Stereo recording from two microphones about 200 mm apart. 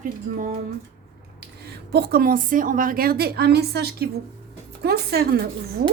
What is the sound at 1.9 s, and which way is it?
A woman's voice, 50° right (ahead or behind).